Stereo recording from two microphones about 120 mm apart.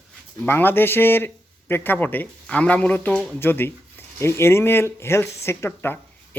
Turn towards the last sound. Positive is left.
turn(degrees=20)  # may be behind; listen again after turning